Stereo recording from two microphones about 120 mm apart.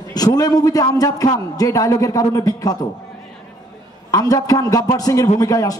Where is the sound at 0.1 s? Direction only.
35° left (ahead or behind).